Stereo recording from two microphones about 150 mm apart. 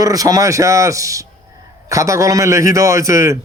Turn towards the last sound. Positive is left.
turn(degrees=-20)  # may be behind; listen again after turning